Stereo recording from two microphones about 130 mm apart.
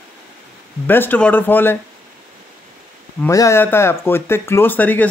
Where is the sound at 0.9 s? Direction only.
15° left (ahead or behind).